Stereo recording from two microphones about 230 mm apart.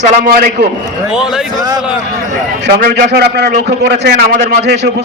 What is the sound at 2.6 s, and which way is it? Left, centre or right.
A man's voice, right.